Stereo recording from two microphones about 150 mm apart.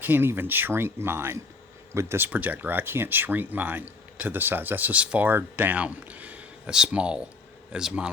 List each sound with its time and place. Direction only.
0.0 s speech: 15° right (ahead or behind)